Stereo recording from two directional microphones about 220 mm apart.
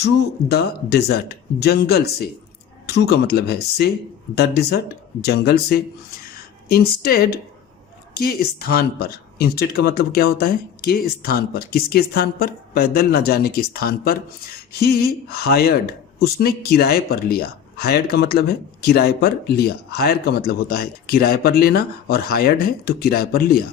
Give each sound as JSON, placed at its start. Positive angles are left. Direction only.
{"t": 0.0, "sound": "speech", "side_deg": 45}